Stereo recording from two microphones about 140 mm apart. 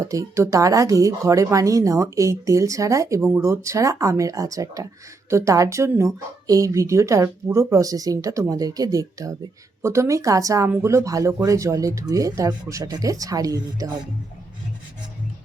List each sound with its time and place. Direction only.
0.0 s speech: 25° right (ahead or behind)